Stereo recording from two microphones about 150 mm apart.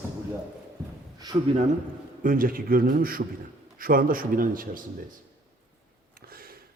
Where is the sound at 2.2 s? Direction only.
65° right (ahead or behind).